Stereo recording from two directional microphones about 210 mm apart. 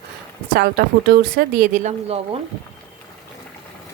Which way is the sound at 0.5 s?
50° right (ahead or behind).